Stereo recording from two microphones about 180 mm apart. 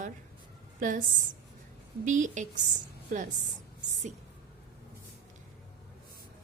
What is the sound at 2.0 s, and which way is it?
A woman's voice, 45° right (ahead or behind).